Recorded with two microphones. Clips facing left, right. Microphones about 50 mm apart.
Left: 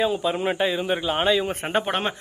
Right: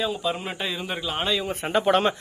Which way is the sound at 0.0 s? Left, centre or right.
Left.